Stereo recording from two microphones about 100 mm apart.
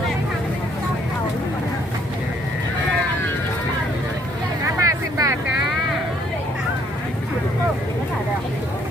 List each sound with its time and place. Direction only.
4.8 s vehicle: 35° right (ahead or behind)